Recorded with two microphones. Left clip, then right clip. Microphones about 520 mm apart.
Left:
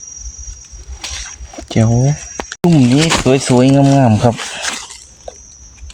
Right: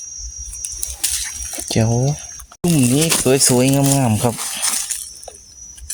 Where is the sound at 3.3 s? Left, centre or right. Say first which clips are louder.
Left 2 dB; right.